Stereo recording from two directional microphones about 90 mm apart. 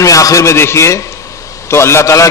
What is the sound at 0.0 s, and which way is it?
A man's voice, 40° left (ahead or behind).